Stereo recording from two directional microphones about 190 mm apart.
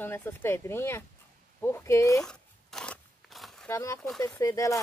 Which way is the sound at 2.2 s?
Centre (ahead or behind).